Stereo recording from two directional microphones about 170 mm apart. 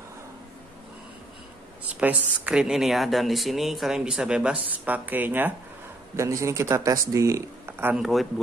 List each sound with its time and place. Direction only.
2.0 s speech: 10° right (ahead or behind)
8.0 s speech: centre (ahead or behind)